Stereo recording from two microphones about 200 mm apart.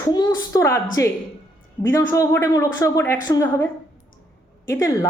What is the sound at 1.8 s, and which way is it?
A woman's voice, 10° left (ahead or behind).